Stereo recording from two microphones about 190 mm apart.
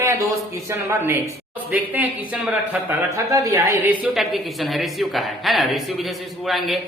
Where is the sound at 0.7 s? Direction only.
10° right (ahead or behind).